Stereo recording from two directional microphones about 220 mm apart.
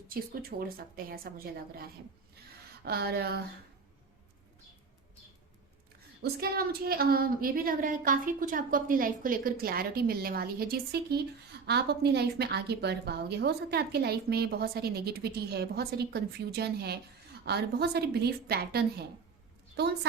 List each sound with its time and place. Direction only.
0.1 s speech: 40° right (ahead or behind)
2.8 s speech: 45° right (ahead or behind)
6.4 s a woman's voice: 45° right (ahead or behind)